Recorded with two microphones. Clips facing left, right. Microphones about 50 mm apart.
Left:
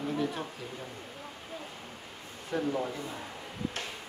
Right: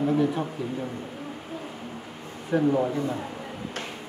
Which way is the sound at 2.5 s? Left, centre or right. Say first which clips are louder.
Right 9 dB; right.